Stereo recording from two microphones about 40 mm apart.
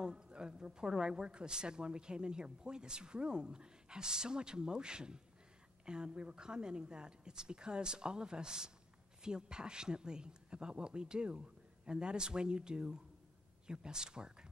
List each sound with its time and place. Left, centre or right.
0.0 s speech: centre